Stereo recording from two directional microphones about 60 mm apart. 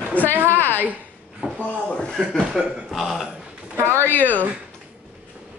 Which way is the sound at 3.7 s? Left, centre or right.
Right.